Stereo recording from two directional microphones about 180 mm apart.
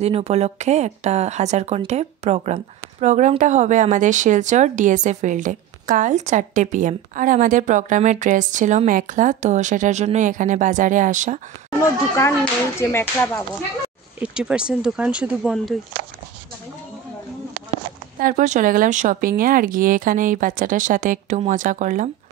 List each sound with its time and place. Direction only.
0.0 s speech: 35° right (ahead or behind)
12.8 s speech: 15° left (ahead or behind)
14.2 s speech: 5° right (ahead or behind)
18.2 s speech: 45° right (ahead or behind)